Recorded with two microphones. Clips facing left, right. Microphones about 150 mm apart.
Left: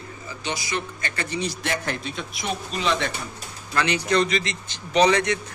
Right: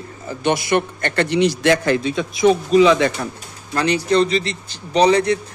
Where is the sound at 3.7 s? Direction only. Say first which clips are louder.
Right 5 dB; 35° right (ahead or behind).